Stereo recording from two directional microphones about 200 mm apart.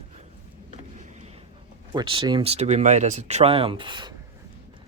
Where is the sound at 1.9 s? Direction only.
25° right (ahead or behind).